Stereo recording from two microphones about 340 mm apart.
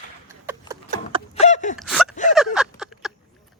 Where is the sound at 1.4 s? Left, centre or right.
Centre.